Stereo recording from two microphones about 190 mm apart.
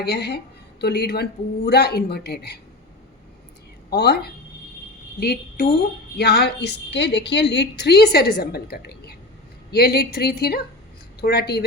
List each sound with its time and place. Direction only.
0.0 s a woman's voice: 60° left (ahead or behind)
3.8 s a woman's voice: 55° left (ahead or behind)